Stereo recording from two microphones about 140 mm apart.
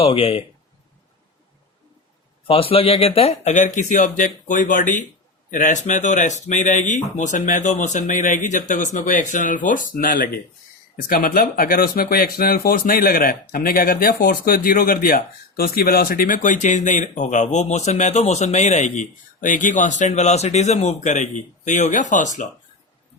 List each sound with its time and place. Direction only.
0.0 s speech: 40° left (ahead or behind)
2.5 s speech: 40° left (ahead or behind); by 22.4 s 65° left (ahead or behind)